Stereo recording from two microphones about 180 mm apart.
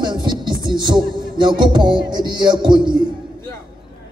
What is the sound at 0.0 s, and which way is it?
Music, 25° right (ahead or behind).